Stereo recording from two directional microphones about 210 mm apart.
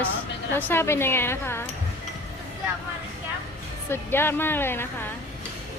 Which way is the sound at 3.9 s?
10° left (ahead or behind).